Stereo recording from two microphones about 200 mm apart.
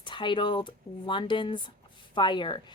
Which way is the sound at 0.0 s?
25° left (ahead or behind).